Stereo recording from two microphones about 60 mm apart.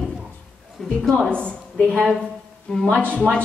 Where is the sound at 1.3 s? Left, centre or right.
Centre.